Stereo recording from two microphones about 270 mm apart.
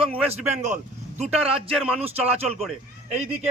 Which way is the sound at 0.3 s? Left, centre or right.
Right.